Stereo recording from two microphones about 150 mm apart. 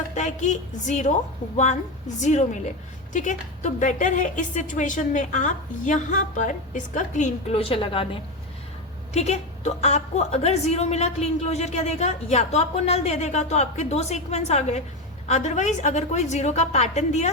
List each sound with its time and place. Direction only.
0.1 s a woman's voice: 55° left (ahead or behind)
2.2 s a woman's voice: 50° left (ahead or behind)
7.5 s a woman's voice: 40° left (ahead or behind)
9.1 s a woman's voice: 45° left (ahead or behind)